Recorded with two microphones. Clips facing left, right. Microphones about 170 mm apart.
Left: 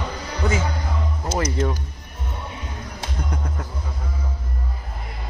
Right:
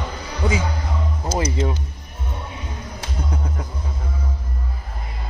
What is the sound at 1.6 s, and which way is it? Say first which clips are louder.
Speech: even; 10° right (ahead or behind).